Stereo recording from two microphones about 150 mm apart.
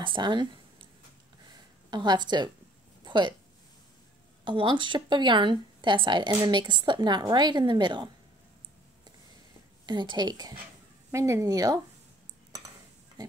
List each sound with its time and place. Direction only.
0.0 s speech: 30° right (ahead or behind)
1.9 s speech: 30° right (ahead or behind)
3.0 s a sound: 30° right (ahead or behind)
4.5 s speech: 35° right (ahead or behind)
9.8 s speech: 30° right (ahead or behind)